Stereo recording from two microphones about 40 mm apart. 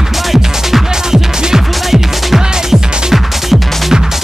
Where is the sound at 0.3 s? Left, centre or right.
Centre.